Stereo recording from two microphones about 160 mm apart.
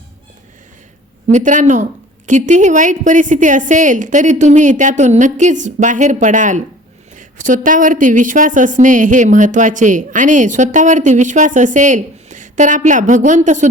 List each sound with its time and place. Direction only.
1.3 s a woman's voice: 50° right (ahead or behind)